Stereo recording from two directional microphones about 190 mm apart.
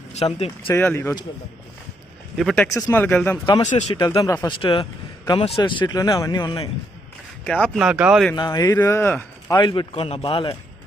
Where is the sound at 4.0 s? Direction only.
20° left (ahead or behind).